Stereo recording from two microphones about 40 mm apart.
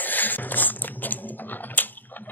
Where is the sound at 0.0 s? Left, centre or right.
Left.